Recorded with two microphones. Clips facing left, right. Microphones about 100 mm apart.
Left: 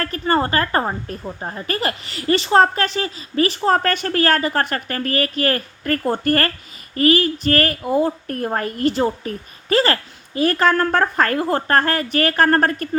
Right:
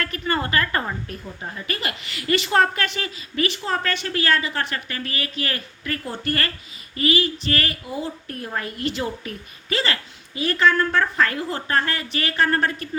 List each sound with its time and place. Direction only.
0.0 s a woman's voice: 35° left (ahead or behind)